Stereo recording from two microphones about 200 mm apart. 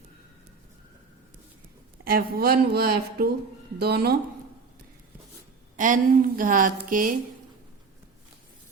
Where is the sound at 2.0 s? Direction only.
50° right (ahead or behind).